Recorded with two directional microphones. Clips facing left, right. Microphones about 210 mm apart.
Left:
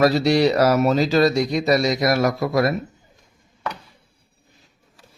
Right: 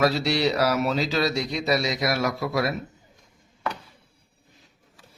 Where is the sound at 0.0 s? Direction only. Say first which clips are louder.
Left 6 dB; 40° left (ahead or behind).